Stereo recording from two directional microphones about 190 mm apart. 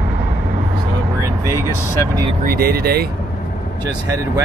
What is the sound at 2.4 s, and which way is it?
Speech, 50° right (ahead or behind).